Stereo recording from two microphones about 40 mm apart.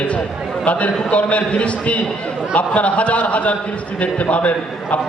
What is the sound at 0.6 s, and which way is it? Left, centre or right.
A man's voice, left.